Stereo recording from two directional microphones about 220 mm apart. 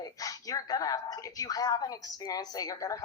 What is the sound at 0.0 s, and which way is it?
A woman's voice, 15° left (ahead or behind).